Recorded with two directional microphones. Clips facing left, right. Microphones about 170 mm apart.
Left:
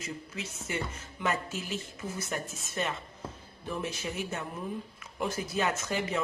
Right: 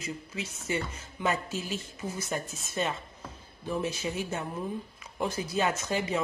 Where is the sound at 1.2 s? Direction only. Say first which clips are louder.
Right 2 dB; 25° right (ahead or behind).